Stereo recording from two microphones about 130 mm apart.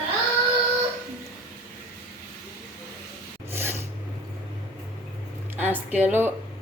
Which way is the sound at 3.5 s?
20° right (ahead or behind).